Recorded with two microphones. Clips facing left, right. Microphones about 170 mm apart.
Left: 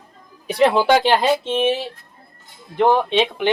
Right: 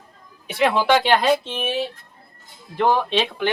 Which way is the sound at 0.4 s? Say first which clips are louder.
Left 3 dB; 35° left (ahead or behind).